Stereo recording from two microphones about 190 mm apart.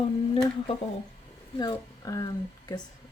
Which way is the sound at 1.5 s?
20° left (ahead or behind).